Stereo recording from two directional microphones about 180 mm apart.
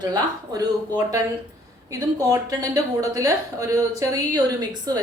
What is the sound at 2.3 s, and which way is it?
A woman's voice, 20° right (ahead or behind).